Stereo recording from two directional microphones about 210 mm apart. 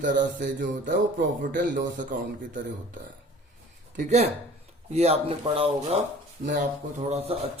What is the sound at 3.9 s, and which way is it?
Speech, 35° right (ahead or behind).